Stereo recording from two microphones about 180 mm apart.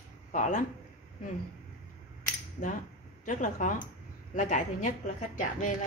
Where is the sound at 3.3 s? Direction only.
45° left (ahead or behind).